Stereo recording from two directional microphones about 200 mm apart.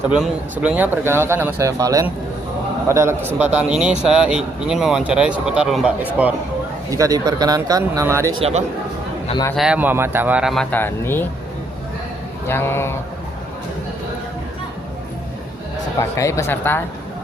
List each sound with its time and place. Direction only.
0.1 s speech: 5° right (ahead or behind)
6.9 s speech: 15° right (ahead or behind)
9.6 s speech: 5° right (ahead or behind); by 11.3 s 10° left (ahead or behind)
12.5 s speech: 10° left (ahead or behind)
16.0 s speech: 15° left (ahead or behind)